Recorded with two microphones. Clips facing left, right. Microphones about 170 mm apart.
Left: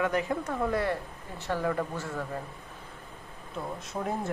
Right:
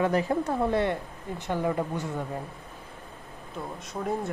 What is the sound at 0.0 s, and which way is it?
Speech, 30° right (ahead or behind).